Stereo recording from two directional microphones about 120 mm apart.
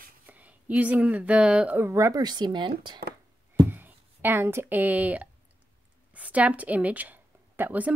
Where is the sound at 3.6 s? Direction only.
15° right (ahead or behind).